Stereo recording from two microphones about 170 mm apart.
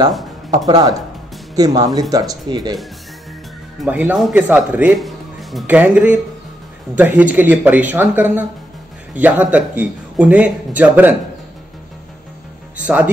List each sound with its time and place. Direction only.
0.7 s speech: 25° right (ahead or behind)
3.8 s a man's voice: 10° right (ahead or behind)
12.7 s speech: 10° right (ahead or behind)